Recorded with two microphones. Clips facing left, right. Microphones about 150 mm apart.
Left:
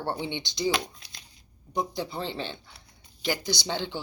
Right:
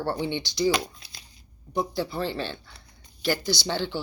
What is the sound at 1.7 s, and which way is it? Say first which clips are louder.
Speech: right 3 dB; 20° left (ahead or behind).